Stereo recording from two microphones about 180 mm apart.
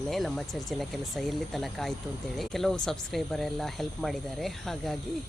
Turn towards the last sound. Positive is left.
turn(degrees=0)  # may be behind; listen again after turning